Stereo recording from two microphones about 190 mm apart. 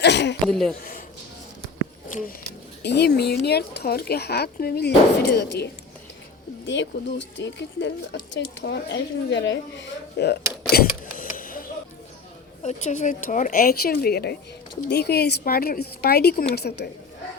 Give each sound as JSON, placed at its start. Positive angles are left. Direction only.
{"t": 0.0, "sound": "speech", "side_deg": 65}
{"t": 0.4, "sound": "speech", "side_deg": 0}
{"t": 2.0, "sound": "speech", "side_deg": 45}
{"t": 2.8, "sound": "speech", "side_deg": 60}
{"t": 6.7, "sound": "speech", "side_deg": 75}
{"t": 10.7, "sound": "power windows", "side_deg": 50}
{"t": 12.6, "sound": "speech", "side_deg": 40}